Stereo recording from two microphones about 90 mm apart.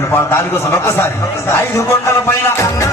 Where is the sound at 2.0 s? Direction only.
30° left (ahead or behind).